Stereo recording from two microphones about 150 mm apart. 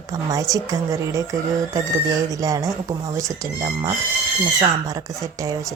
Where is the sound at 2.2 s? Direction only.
20° right (ahead or behind).